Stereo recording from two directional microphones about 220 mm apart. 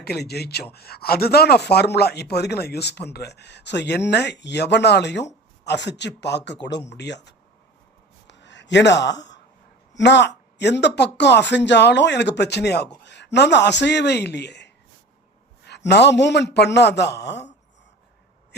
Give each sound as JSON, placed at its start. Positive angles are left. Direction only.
{"t": 0.0, "sound": "speech", "side_deg": 45}
{"t": 8.3, "sound": "a sound", "side_deg": 55}
{"t": 9.9, "sound": "speech", "side_deg": 50}